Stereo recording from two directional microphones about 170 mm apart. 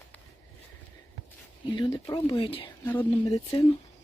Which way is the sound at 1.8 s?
25° left (ahead or behind).